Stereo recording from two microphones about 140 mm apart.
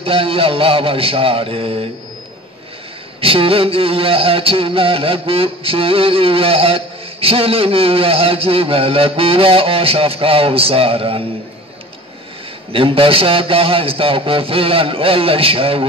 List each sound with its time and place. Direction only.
0.0 s a man's voice: 40° right (ahead or behind)
3.2 s a sound: 40° right (ahead or behind)
12.7 s a man's voice: 40° right (ahead or behind)